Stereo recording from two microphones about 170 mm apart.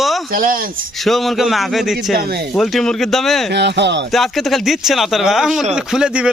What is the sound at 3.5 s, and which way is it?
Speech, 85° right.